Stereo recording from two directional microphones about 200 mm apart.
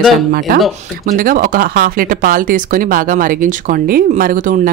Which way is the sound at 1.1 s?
45° right (ahead or behind).